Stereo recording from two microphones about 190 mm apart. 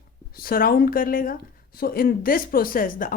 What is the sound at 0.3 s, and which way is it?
Speech, 50° left (ahead or behind).